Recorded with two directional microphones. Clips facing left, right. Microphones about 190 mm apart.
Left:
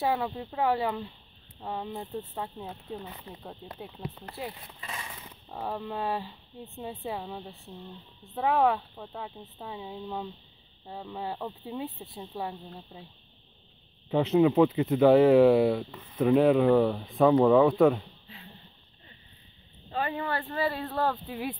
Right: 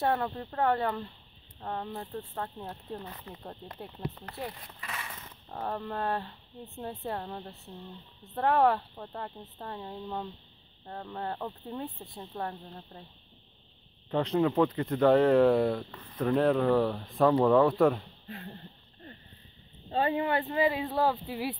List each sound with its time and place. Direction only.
0.0 s speech: centre (ahead or behind)
4.7 s a sound: 20° left (ahead or behind)
5.1 s speech: 10° left (ahead or behind)
14.1 s speech: 5° left (ahead or behind)
18.2 s a sound: 50° right (ahead or behind)
19.9 s speech: 25° right (ahead or behind); by 21.5 s 5° right (ahead or behind)